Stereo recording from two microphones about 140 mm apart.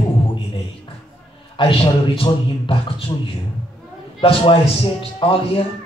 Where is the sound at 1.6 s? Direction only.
40° left (ahead or behind).